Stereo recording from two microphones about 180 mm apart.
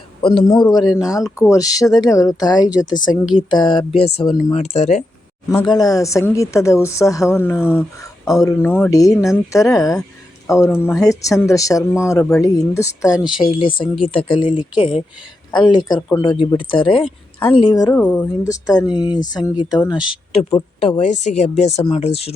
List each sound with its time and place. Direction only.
0.2 s speech: 25° left (ahead or behind)
4.5 s a woman's voice: 40° left (ahead or behind)
5.6 s a woman's voice: 20° left (ahead or behind)
13.8 s speech: centre (ahead or behind)
14.1 s speech: 30° left (ahead or behind)
17.9 s a woman's voice: 5° left (ahead or behind)
18.4 s speech: 20° left (ahead or behind)
20.8 s a woman's voice: 35° left (ahead or behind)